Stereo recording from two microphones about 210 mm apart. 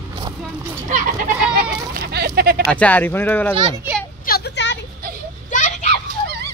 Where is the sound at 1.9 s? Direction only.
45° right (ahead or behind).